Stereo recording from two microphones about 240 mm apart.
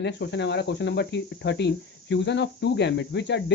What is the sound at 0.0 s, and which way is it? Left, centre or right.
Speech, left.